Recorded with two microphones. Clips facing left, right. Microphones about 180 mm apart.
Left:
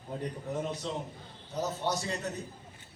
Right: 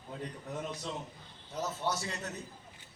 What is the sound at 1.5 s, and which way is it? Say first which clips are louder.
Speech: left 3 dB; 35° left (ahead or behind).